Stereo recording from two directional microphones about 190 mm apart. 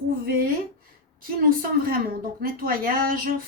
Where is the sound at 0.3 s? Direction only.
50° right (ahead or behind).